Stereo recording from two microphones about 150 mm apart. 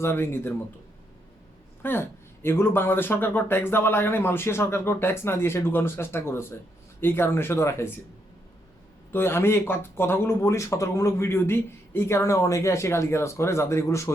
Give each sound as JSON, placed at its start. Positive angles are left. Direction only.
{"t": 0.0, "sound": "speech", "side_deg": 15}
{"t": 1.8, "sound": "speech", "side_deg": 15}
{"t": 9.1, "sound": "speech", "side_deg": 15}